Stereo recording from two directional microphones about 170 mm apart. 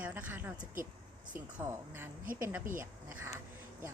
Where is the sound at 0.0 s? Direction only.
10° right (ahead or behind).